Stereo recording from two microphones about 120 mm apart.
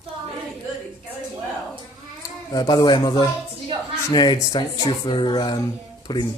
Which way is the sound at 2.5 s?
35° left (ahead or behind).